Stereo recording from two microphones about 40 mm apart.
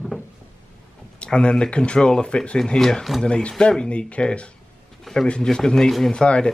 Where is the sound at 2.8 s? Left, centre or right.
Centre.